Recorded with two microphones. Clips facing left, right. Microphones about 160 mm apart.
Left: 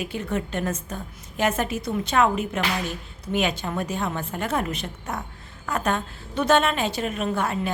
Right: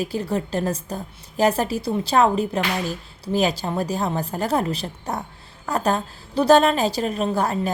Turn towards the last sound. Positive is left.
turn(degrees=-35)  # may be behind; listen again after turning